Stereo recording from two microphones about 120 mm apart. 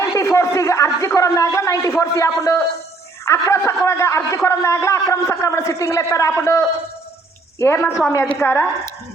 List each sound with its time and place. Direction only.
0.0 s a man's voice: 25° left (ahead or behind)